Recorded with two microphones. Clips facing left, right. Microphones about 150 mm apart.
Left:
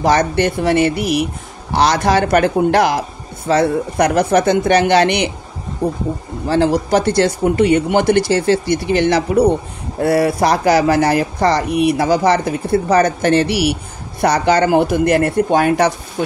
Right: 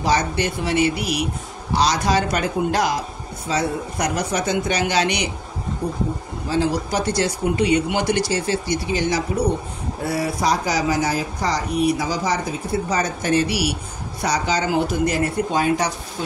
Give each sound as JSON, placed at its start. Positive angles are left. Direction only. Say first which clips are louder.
{"t": 0.0, "sound": "speech", "louder": "left 6 dB", "side_deg": 55}
{"t": 6.4, "sound": "speech", "louder": "left 6 dB", "side_deg": 65}